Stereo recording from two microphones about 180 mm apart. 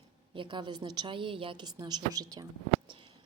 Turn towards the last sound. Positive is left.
turn(degrees=-25)  # may be behind; listen again after turning